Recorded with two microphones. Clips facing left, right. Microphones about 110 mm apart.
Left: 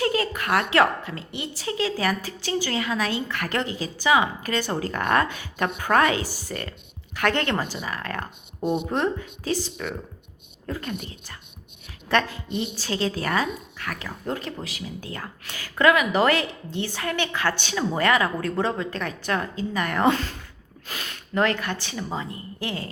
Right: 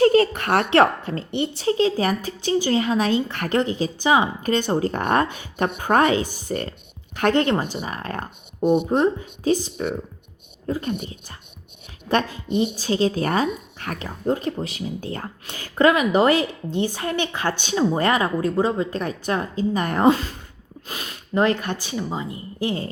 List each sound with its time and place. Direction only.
0.0 s a woman's voice: 35° right (ahead or behind)
6.5 s speech: 30° right (ahead or behind)
7.2 s a woman's voice: 20° right (ahead or behind)
12.0 s a woman's voice: 20° right (ahead or behind)